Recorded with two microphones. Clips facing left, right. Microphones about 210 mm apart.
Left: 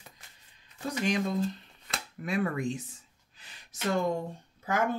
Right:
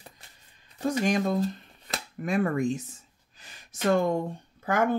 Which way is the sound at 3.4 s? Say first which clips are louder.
Right 6 dB; 50° right (ahead or behind).